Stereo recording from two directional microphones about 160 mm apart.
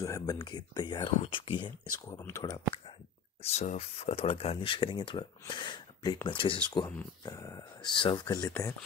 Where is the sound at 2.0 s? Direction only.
20° left (ahead or behind).